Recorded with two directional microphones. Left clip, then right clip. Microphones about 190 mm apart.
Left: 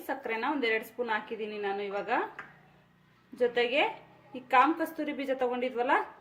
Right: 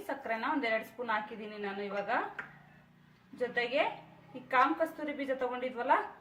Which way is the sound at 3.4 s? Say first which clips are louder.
Left 5 dB; 55° left (ahead or behind).